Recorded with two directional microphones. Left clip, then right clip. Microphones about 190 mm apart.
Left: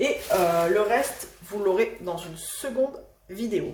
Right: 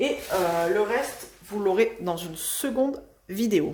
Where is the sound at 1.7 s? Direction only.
35° right (ahead or behind).